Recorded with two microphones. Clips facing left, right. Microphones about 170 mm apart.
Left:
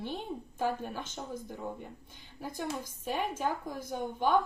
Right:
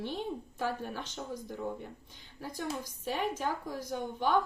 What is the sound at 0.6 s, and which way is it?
Speech, 50° left (ahead or behind).